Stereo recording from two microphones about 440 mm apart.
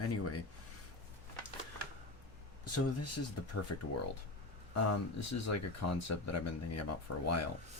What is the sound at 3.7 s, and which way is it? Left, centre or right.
Speech, left.